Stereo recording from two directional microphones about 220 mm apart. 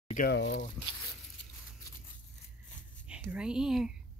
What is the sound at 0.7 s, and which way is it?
Speech, 20° left (ahead or behind).